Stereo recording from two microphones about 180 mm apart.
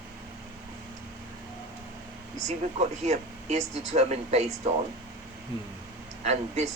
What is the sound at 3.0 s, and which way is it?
Speech, 40° right (ahead or behind).